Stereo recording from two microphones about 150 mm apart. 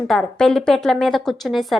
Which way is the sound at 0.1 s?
5° left (ahead or behind).